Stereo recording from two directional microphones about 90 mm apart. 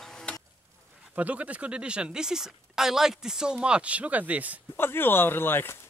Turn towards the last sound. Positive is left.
turn(degrees=25)  # may be behind; listen again after turning